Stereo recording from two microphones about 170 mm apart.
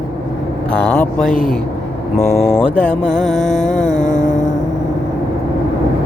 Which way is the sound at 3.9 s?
20° right (ahead or behind).